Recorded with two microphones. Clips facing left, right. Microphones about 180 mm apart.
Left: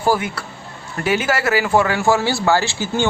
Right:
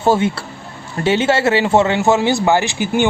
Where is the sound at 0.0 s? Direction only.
25° right (ahead or behind).